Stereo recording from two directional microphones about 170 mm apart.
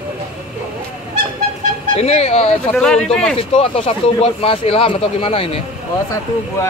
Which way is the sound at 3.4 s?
35° left (ahead or behind).